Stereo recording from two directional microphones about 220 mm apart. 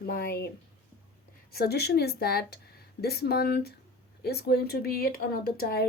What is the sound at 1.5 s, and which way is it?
Speech, 45° left (ahead or behind).